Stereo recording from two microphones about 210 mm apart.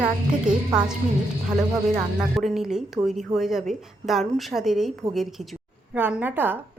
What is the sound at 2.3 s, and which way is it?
A woman's voice, centre (ahead or behind).